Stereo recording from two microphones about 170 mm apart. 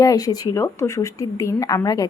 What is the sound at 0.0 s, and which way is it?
Speech, 20° left (ahead or behind).